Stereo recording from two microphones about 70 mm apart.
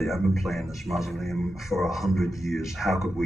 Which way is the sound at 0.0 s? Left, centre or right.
Centre.